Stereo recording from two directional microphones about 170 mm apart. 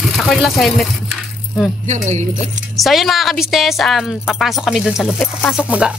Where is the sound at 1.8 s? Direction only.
45° right (ahead or behind).